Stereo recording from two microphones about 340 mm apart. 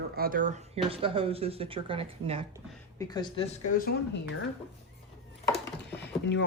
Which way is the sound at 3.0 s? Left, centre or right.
Centre.